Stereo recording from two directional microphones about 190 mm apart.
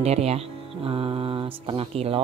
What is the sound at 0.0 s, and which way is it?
Speech, 35° right (ahead or behind).